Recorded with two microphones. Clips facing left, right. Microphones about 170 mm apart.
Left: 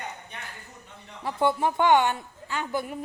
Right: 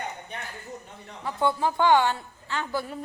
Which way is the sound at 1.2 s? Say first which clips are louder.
Left 1 dB; 25° left (ahead or behind).